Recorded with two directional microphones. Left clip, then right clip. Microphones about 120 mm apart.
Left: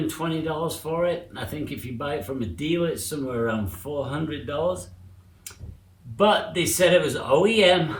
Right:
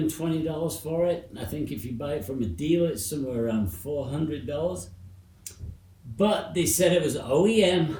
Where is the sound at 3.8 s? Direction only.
25° left (ahead or behind).